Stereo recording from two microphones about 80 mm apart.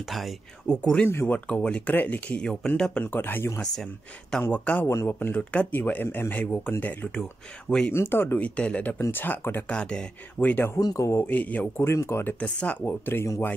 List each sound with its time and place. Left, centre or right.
0.7 s speech: centre
3.0 s speech: left
8.5 s speech: centre
9.7 s speech: centre
10.5 s speech: left
10.8 s speech: left
11.1 s speech: left
11.8 s speech: left
12.4 s speech: centre